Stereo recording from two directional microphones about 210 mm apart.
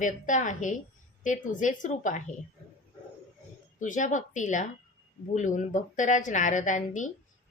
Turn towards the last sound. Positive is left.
turn(degrees=35)  # may be behind; listen again after turning